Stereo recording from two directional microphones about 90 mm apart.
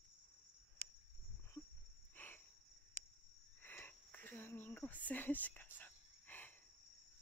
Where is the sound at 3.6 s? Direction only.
20° left (ahead or behind).